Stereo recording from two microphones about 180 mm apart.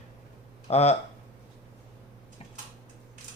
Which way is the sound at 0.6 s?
35° left (ahead or behind).